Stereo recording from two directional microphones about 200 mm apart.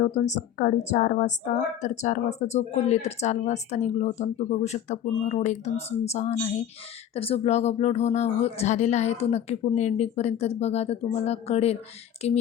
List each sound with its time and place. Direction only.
0.0 s a woman's voice: 35° left (ahead or behind)